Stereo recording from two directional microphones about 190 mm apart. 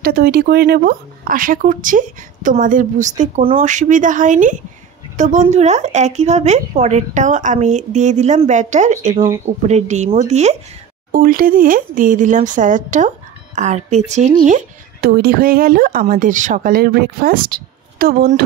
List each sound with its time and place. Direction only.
0.0 s speech: 55° right (ahead or behind); by 10.6 s 35° right (ahead or behind)
11.1 s speech: 50° right (ahead or behind)
15.0 s speech: 55° right (ahead or behind)